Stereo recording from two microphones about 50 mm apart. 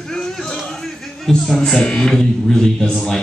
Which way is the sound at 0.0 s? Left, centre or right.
Centre.